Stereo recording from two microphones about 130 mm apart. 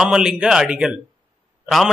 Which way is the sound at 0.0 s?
5° right (ahead or behind).